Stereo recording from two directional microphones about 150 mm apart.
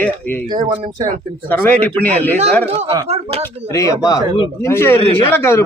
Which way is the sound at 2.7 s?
40° right (ahead or behind).